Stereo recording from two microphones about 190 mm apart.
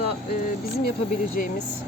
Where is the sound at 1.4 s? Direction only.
45° left (ahead or behind).